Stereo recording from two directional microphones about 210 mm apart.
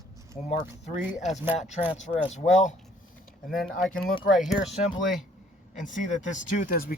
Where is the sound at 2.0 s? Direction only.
35° left (ahead or behind).